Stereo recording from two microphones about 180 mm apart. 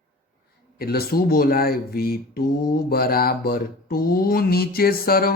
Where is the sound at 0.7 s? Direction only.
60° left (ahead or behind).